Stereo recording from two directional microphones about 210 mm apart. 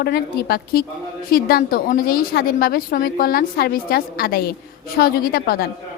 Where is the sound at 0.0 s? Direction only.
50° left (ahead or behind).